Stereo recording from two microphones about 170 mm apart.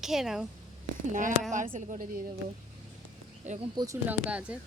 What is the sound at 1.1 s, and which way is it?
Speech, 50° right (ahead or behind).